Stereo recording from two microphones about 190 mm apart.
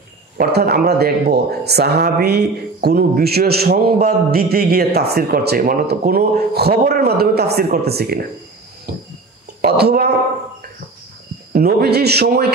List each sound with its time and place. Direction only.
0.4 s speech: 55° right (ahead or behind)
8.9 s a sound: 50° right (ahead or behind)
9.6 s speech: 55° right (ahead or behind)
11.5 s speech: 55° right (ahead or behind)